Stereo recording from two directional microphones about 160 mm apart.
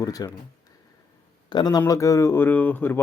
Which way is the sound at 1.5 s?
25° left (ahead or behind).